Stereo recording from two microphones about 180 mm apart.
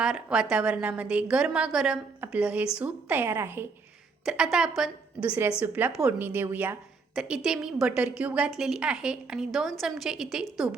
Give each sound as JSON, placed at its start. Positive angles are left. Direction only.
{"t": 0.0, "sound": "a woman's voice", "side_deg": -5}